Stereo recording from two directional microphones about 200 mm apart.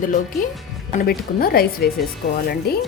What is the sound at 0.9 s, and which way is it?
Speech, 50° left (ahead or behind).